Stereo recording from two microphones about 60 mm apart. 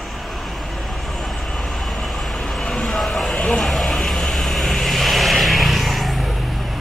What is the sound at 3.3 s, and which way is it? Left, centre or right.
Vehicle, centre.